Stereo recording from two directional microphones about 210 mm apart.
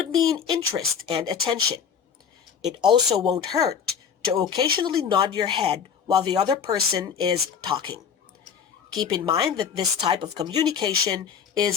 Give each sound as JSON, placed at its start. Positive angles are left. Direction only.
{"t": 0.1, "sound": "speech", "side_deg": -15}
{"t": 9.0, "sound": "speech", "side_deg": -20}